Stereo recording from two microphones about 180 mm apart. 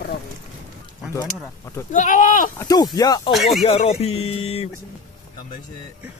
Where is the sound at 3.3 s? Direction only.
Centre (ahead or behind).